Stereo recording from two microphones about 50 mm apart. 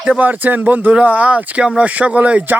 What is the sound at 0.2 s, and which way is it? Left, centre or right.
Speech, right.